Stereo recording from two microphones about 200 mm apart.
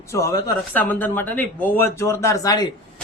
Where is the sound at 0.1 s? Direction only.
15° left (ahead or behind).